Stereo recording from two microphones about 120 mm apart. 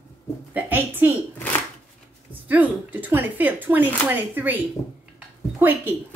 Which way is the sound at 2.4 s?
15° right (ahead or behind).